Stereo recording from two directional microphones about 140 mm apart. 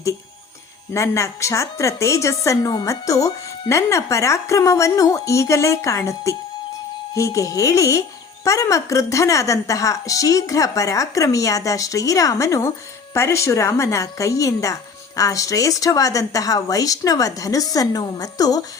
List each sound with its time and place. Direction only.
0.9 s a woman's voice: 20° left (ahead or behind)